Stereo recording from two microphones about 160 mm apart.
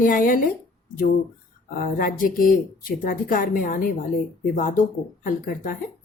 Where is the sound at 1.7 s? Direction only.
60° left (ahead or behind).